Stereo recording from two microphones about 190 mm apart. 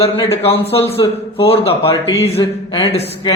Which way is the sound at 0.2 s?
30° left (ahead or behind).